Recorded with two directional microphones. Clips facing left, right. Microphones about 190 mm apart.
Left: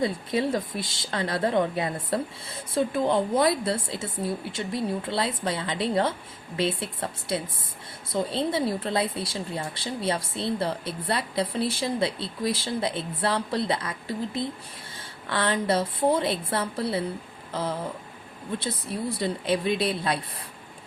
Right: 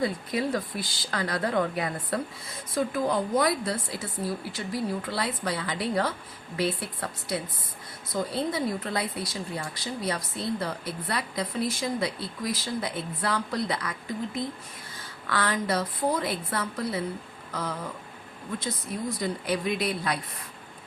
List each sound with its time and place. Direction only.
0.0 s speech: 25° left (ahead or behind)